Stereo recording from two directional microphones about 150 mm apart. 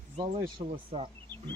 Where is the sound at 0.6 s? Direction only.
40° right (ahead or behind).